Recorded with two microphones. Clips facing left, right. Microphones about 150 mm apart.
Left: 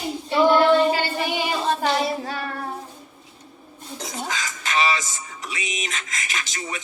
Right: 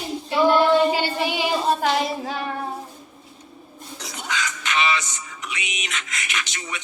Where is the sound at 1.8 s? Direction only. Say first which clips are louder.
Even; 10° right (ahead or behind).